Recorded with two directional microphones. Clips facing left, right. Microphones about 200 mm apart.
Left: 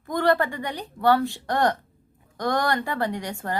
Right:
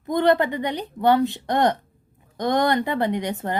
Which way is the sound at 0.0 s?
20° right (ahead or behind).